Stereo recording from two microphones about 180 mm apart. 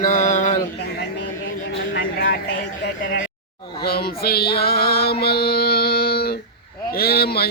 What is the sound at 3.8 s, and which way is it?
Music, 60° left (ahead or behind).